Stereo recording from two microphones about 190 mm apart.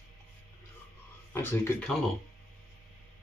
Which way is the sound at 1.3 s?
10° left (ahead or behind).